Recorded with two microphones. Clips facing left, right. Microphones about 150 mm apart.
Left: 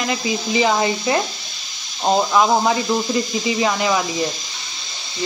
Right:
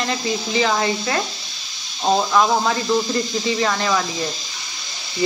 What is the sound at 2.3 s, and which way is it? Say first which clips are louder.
Speech: left 2 dB; 15° left (ahead or behind).